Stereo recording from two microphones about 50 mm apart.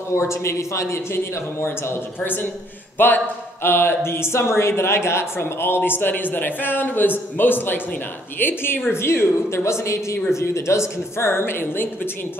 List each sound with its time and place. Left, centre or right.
0.1 s a man's voice: left
1.1 s speech: left
3.6 s speech: left
8.9 s a woman's voice: left